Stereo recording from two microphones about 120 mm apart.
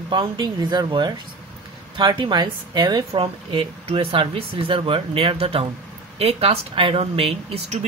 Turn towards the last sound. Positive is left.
turn(degrees=-55)  # may be behind; listen again after turning